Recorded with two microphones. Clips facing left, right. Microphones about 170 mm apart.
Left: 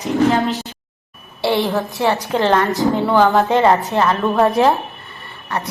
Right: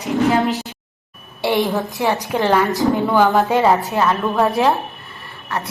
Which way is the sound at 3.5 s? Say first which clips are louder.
Left 1 dB; centre (ahead or behind).